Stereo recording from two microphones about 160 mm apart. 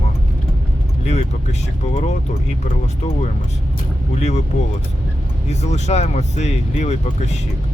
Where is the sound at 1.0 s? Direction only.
45° left (ahead or behind).